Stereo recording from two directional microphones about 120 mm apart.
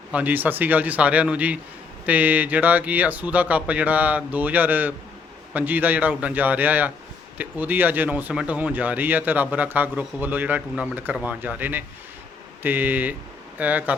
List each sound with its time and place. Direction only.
0.1 s speech: 15° right (ahead or behind)